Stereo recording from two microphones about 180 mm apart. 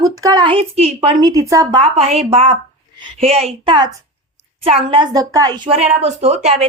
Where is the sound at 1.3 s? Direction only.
20° right (ahead or behind).